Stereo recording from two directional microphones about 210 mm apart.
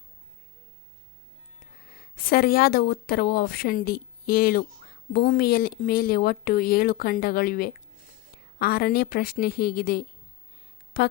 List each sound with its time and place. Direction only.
1.9 s speech: 45° left (ahead or behind)